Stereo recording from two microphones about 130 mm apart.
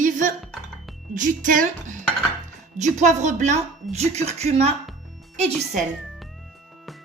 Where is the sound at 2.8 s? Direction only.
70° right (ahead or behind).